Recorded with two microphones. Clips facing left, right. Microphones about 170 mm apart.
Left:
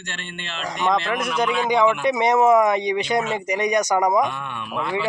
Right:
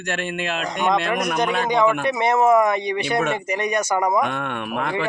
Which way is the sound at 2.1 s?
15° left (ahead or behind).